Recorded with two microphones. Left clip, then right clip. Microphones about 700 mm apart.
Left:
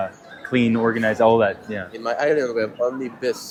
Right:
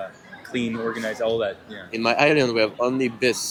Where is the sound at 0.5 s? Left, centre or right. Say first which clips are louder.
Left 7 dB; left.